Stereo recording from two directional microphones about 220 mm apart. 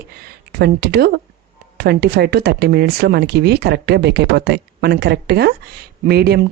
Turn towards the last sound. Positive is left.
turn(degrees=-45)  # may be behind; listen again after turning